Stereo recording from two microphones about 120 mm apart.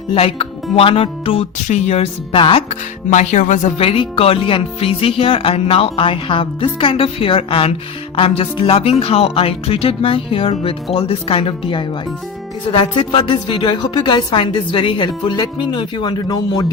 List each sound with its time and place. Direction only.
0.1 s speech: 50° left (ahead or behind)
1.6 s speech: 65° left (ahead or behind)
2.6 s speech: 85° left
3.8 s a woman's voice: 50° left (ahead or behind)